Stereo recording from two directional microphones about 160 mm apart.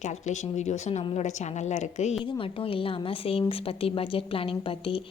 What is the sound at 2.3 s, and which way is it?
A woman's voice, 35° left (ahead or behind).